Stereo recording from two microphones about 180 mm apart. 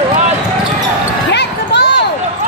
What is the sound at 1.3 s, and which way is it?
Basketball bounce, 70° left (ahead or behind).